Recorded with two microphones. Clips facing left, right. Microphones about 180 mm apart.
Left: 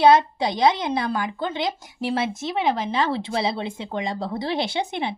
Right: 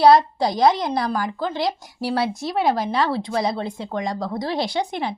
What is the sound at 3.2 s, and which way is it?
Speech, 25° left (ahead or behind).